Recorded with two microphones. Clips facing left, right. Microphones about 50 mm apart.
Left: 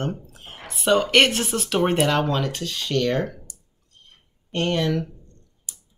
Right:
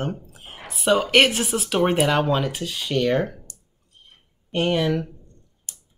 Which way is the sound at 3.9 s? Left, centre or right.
Centre.